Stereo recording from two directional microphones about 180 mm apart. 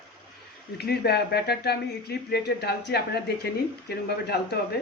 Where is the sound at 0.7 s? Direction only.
65° left (ahead or behind).